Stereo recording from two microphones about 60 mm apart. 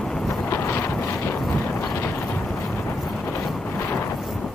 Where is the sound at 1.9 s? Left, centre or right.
Left.